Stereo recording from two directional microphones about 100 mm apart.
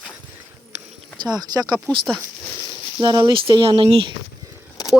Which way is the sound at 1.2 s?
40° right (ahead or behind).